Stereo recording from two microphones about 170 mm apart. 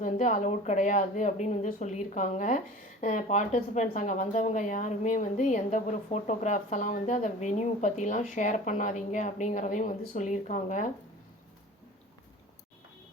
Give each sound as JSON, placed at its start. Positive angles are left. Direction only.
{"t": 0.0, "sound": "a woman's voice", "side_deg": 50}